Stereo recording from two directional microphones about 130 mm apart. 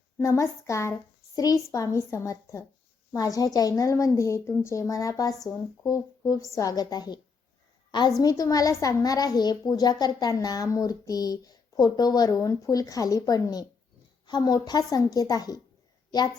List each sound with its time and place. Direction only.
0.2 s a child's voice: 25° left (ahead or behind)